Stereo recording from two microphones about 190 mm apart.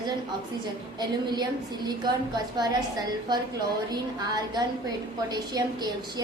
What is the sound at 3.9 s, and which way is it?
A woman's voice, 20° right (ahead or behind).